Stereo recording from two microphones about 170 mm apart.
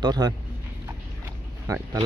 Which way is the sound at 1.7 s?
20° right (ahead or behind).